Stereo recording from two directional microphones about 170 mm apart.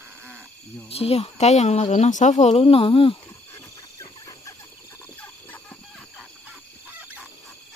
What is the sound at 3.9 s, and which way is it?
Chicken, 20° left (ahead or behind).